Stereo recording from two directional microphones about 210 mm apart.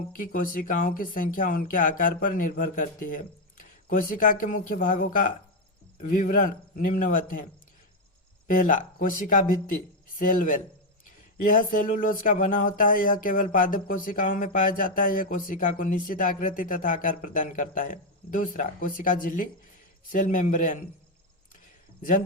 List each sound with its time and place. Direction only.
0.2 s speech: 40° left (ahead or behind)
8.4 s speech: 40° left (ahead or behind)